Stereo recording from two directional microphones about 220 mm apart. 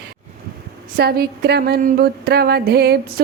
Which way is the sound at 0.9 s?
45° right (ahead or behind).